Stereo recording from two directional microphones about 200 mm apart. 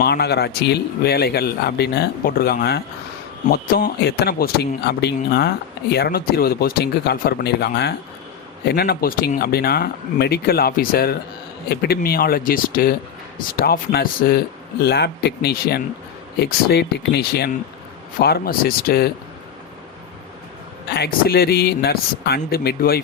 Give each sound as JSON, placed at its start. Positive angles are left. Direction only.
{"t": 0.0, "sound": "speech", "side_deg": 55}
{"t": 20.9, "sound": "speech", "side_deg": 50}